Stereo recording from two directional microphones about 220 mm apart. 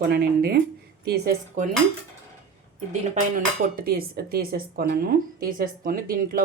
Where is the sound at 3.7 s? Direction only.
45° right (ahead or behind).